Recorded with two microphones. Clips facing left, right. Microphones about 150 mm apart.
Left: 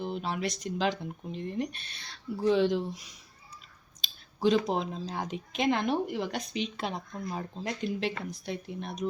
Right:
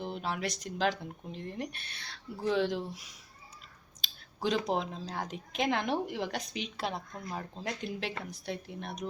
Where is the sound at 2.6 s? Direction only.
5° right (ahead or behind).